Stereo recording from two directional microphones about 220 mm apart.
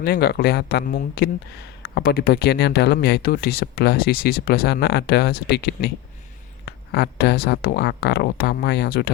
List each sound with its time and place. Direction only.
0.0 s speech: 45° left (ahead or behind)